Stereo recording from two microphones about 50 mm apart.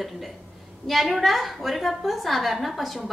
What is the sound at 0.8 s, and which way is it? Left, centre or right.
A woman's voice, centre.